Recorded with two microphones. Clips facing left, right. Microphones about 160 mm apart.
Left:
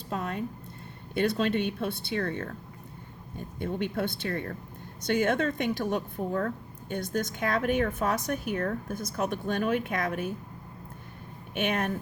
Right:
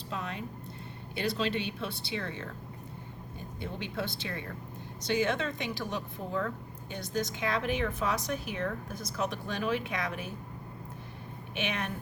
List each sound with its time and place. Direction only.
0.1 s a sound: 50° left (ahead or behind)
1.1 s a woman's voice: 55° left (ahead or behind)
3.6 s a woman's voice: 55° left (ahead or behind)
11.5 s a woman's voice: 50° left (ahead or behind)